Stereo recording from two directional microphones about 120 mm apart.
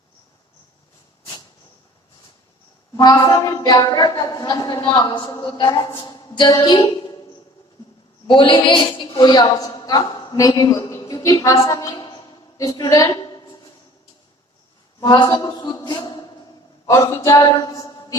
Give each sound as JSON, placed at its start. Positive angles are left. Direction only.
{"t": 3.0, "sound": "a woman's voice", "side_deg": 35}
{"t": 8.3, "sound": "a woman's voice", "side_deg": 45}
{"t": 15.0, "sound": "a woman's voice", "side_deg": 35}